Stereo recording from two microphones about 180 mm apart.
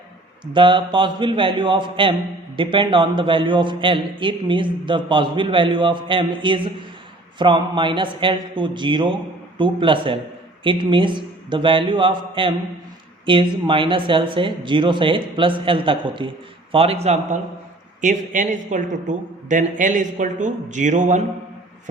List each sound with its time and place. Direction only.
0.5 s a man's voice: 25° right (ahead or behind); by 21.2 s 40° right (ahead or behind)